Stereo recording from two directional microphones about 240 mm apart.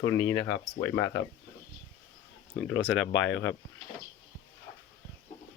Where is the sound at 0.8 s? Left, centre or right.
Centre.